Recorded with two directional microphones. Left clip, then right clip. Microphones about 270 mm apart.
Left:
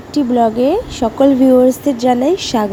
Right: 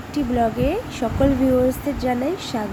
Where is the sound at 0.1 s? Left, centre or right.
Left.